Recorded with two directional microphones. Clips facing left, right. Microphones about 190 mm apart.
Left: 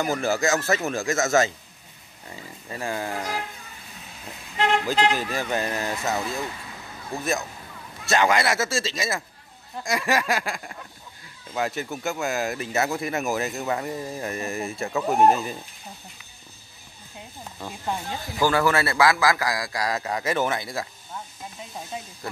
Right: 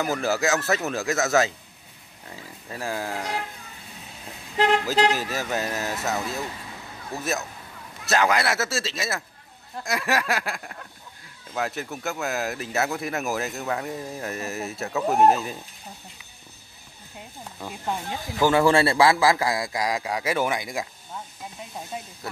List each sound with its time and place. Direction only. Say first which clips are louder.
0.0 s speech: left 1 dB; centre (ahead or behind)
5.1 s speech: left 1 dB; 5° right (ahead or behind)
17.6 s speech: even; centre (ahead or behind)
18.4 s a man's voice: right 3 dB; 25° right (ahead or behind)
22.2 s speech: left 1 dB; 5° right (ahead or behind)